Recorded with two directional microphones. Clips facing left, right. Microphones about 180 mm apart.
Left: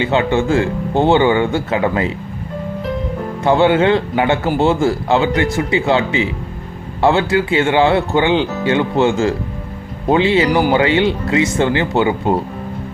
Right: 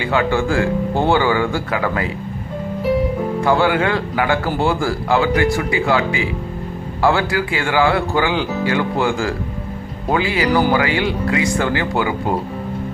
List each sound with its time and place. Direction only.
0.0 s speech: 25° left (ahead or behind)
3.4 s speech: 25° left (ahead or behind)